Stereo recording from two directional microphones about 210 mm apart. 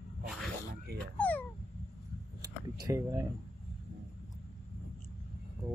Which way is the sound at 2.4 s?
15° right (ahead or behind).